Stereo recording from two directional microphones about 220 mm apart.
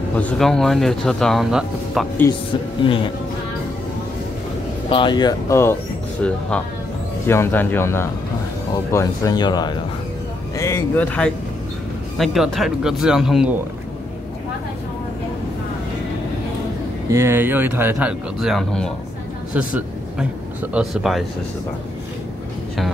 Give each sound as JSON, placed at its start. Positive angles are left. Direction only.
{"t": 0.2, "sound": "speech", "side_deg": 0}
{"t": 2.8, "sound": "speech", "side_deg": 25}
{"t": 4.8, "sound": "speech", "side_deg": 20}
{"t": 17.1, "sound": "speech", "side_deg": -10}
{"t": 20.7, "sound": "speech", "side_deg": 0}